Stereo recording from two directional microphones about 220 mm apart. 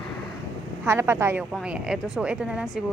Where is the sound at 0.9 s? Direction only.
10° right (ahead or behind).